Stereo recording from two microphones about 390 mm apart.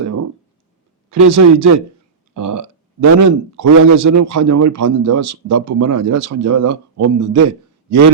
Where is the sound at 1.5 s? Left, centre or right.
Right.